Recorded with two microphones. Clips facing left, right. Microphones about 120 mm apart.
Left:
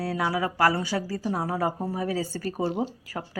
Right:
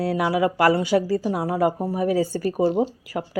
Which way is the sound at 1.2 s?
10° right (ahead or behind).